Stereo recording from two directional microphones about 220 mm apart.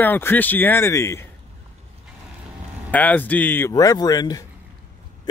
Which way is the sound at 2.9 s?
5° left (ahead or behind).